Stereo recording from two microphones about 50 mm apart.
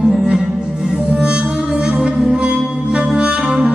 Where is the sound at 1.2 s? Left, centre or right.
Right.